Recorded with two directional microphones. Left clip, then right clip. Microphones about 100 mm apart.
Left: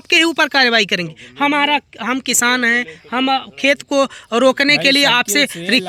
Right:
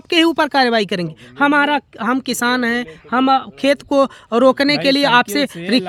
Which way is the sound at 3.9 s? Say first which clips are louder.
Right 1 dB; 45° right (ahead or behind).